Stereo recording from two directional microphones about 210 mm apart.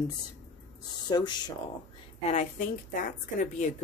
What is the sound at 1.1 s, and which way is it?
Speech, 20° left (ahead or behind).